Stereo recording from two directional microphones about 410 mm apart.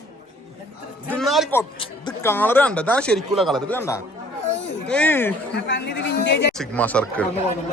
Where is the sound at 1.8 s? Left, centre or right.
Centre.